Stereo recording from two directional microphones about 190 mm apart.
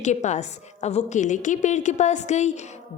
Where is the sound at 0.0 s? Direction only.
40° left (ahead or behind).